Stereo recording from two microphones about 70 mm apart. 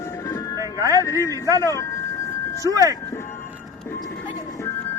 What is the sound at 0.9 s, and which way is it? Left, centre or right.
Music, left.